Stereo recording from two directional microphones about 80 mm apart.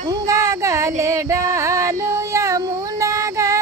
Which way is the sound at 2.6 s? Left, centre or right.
Right.